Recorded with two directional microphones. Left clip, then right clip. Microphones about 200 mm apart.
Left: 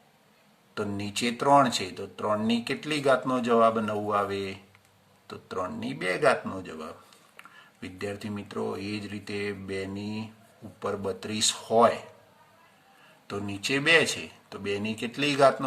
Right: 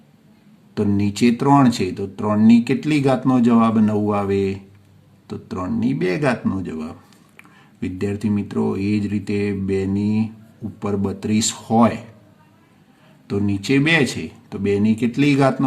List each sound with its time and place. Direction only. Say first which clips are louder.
0.7 s speech: right 10 dB; 25° right (ahead or behind)
13.2 s speech: right 9 dB; 25° right (ahead or behind)